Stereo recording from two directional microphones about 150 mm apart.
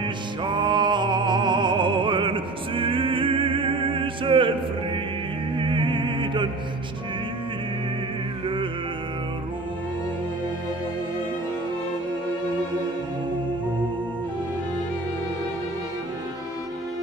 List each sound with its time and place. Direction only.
0.5 s music: 30° right (ahead or behind)
5.6 s opera: 35° right (ahead or behind)